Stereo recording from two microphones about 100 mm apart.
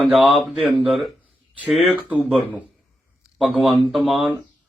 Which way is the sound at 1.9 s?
15° right (ahead or behind).